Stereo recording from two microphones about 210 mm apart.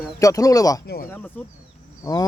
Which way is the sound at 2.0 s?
15° left (ahead or behind).